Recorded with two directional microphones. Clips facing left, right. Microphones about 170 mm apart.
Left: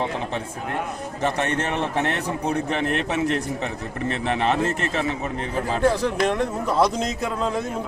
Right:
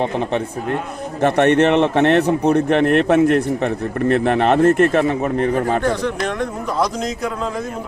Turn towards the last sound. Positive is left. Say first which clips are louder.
# even
turn(degrees=0)  # may be behind; listen again after turning